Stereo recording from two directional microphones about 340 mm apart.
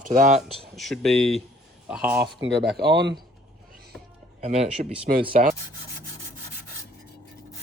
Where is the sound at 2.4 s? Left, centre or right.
Right.